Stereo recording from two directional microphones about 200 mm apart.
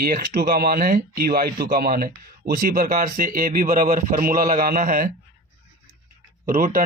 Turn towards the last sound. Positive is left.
turn(degrees=-45)  # may be behind; listen again after turning